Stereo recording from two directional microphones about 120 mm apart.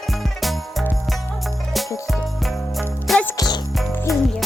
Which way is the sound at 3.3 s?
35° left (ahead or behind).